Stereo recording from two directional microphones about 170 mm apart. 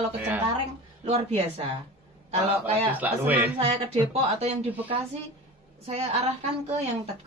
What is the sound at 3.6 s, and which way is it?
Speech, 35° right (ahead or behind).